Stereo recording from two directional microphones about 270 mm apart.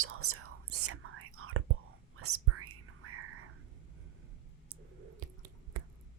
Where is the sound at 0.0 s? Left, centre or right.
Right.